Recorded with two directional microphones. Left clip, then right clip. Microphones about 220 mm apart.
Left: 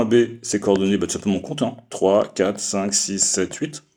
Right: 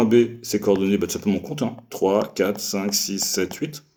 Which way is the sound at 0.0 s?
35° left (ahead or behind).